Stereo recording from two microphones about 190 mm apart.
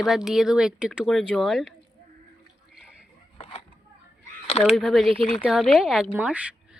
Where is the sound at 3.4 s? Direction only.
30° left (ahead or behind).